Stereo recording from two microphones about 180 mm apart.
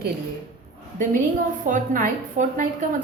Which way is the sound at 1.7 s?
45° right (ahead or behind).